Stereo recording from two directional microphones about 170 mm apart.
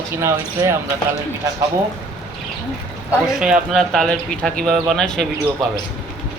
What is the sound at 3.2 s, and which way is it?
Speech, 5° right (ahead or behind).